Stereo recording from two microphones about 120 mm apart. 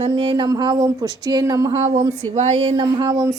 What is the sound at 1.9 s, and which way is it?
Speech, 70° right (ahead or behind).